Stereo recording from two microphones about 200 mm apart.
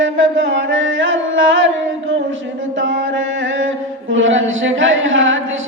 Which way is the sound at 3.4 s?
70° right (ahead or behind).